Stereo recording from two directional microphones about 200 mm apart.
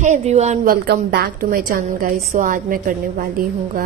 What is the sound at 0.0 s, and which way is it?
Speech, 35° right (ahead or behind).